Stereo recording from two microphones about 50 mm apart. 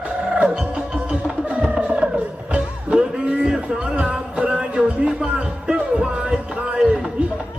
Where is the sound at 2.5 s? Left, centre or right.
Centre.